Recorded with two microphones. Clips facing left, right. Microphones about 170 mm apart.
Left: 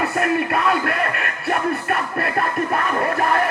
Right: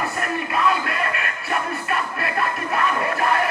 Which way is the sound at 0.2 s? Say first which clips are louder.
Left 4 dB; 55° left (ahead or behind).